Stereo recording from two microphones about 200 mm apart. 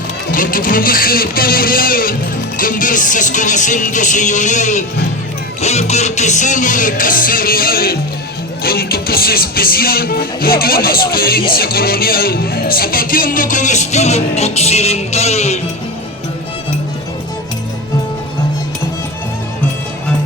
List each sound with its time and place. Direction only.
0.3 s music: 45° left (ahead or behind)